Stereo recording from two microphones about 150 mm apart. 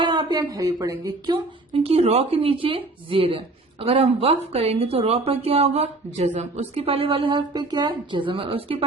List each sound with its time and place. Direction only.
0.0 s speech: 30° right (ahead or behind)
1.7 s speech: 40° right (ahead or behind)